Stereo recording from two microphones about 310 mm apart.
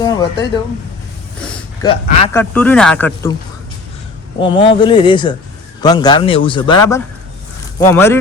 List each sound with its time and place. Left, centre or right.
0.0 s speech: centre
1.4 s a sound: centre
2.4 s speech: centre
4.4 s speech: centre